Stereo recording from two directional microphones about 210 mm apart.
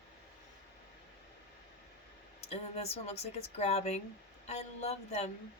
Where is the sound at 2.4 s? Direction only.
30° left (ahead or behind).